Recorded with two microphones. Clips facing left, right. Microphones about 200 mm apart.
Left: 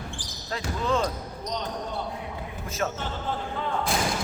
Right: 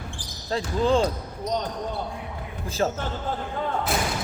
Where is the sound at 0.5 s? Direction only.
30° right (ahead or behind).